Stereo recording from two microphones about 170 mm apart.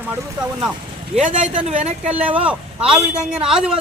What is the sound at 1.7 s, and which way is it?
Speech, 40° right (ahead or behind).